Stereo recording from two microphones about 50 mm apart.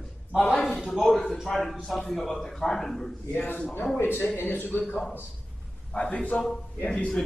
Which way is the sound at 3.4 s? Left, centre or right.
Left.